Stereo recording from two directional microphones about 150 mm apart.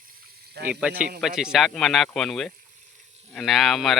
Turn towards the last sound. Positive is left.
turn(degrees=0)  # may be behind; listen again after turning